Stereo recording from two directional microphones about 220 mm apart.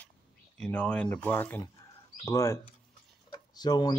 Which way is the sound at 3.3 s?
20° left (ahead or behind).